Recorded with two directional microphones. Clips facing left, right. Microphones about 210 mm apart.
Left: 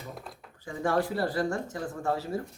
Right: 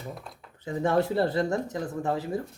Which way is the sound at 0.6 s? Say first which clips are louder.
Right 3 dB; 20° right (ahead or behind).